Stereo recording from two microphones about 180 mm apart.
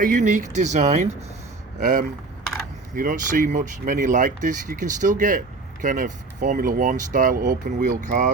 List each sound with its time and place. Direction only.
0.0 s speech: 45° right (ahead or behind)